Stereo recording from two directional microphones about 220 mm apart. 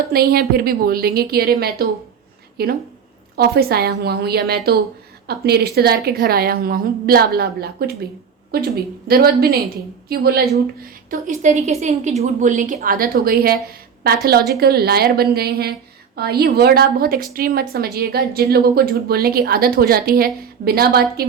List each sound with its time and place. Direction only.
0.1 s a woman's voice: 45° right (ahead or behind)
11.1 s a woman's voice: 35° right (ahead or behind)